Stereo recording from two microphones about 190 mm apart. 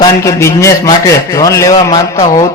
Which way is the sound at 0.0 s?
15° left (ahead or behind).